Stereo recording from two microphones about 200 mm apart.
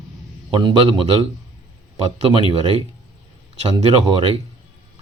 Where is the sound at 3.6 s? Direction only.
30° right (ahead or behind).